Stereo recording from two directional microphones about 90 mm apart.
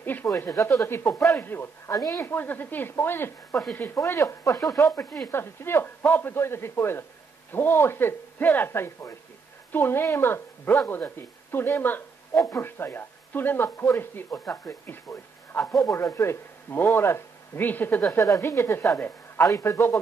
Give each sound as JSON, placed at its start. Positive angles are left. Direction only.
{"t": 0.0, "sound": "speech", "side_deg": 20}
{"t": 0.5, "sound": "speech", "side_deg": 35}
{"t": 4.0, "sound": "speech", "side_deg": 30}
{"t": 19.4, "sound": "speech", "side_deg": 35}